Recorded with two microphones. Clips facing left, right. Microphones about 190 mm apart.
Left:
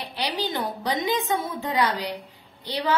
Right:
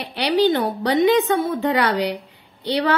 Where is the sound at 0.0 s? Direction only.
70° right (ahead or behind).